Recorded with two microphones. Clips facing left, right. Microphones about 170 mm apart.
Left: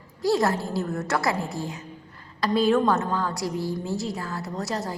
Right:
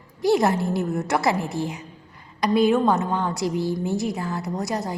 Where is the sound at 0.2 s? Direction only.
20° right (ahead or behind).